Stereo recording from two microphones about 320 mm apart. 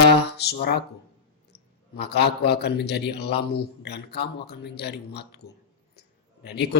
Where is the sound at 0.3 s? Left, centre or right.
Left.